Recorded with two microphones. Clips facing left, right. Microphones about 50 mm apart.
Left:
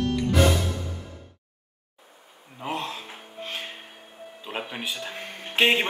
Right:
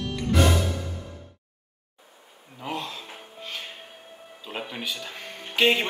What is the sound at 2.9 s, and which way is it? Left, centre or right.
Music, left.